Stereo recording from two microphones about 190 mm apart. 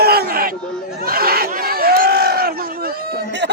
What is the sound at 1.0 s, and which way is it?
Crowd, 50° right (ahead or behind).